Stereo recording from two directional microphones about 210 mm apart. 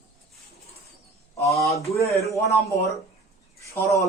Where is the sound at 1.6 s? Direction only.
15° left (ahead or behind).